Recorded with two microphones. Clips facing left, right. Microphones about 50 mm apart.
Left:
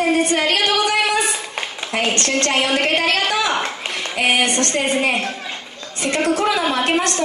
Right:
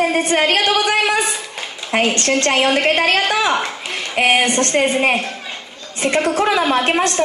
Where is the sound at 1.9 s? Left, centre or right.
Right.